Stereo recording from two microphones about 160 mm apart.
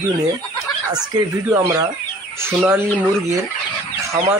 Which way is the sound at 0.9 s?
20° right (ahead or behind).